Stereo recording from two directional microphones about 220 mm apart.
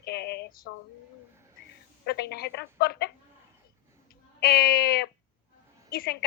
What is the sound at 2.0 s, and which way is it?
Speech, 45° left (ahead or behind).